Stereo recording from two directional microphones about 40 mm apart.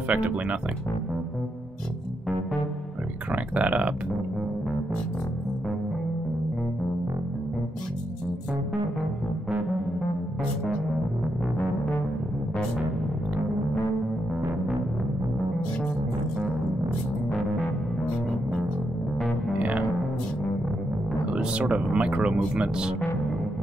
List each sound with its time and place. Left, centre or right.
0.1 s speech: right
3.3 s a sound: right
21.3 s speech: right